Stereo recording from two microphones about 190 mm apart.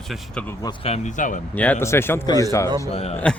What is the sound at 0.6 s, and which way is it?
Speech, 20° left (ahead or behind).